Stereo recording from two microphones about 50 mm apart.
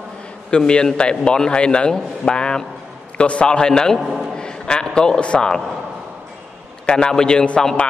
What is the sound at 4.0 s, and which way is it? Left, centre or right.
Speech, centre.